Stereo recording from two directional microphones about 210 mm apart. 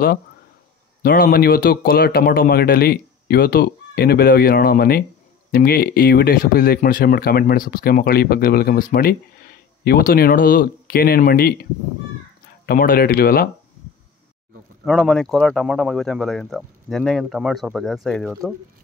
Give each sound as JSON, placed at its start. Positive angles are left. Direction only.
{"t": 1.0, "sound": "speech", "side_deg": 45}
{"t": 12.6, "sound": "speech", "side_deg": 45}
{"t": 14.9, "sound": "speech", "side_deg": 0}